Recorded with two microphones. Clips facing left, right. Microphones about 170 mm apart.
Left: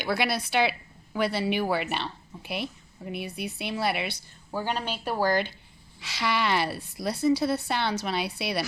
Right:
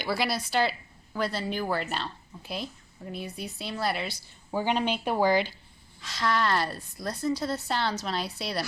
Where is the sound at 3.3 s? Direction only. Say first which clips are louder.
Left 3 dB; 65° left (ahead or behind).